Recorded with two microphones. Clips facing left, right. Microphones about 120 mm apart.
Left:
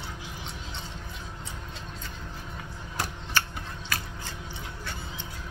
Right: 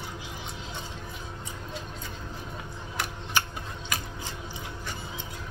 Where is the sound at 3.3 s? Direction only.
15° right (ahead or behind).